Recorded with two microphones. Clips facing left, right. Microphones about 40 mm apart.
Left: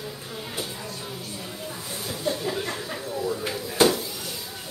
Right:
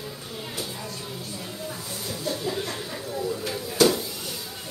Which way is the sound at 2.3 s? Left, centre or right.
Left.